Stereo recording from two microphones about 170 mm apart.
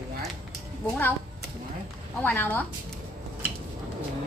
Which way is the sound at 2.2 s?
10° left (ahead or behind).